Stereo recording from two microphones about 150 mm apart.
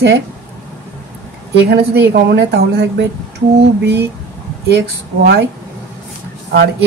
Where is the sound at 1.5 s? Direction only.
90° right.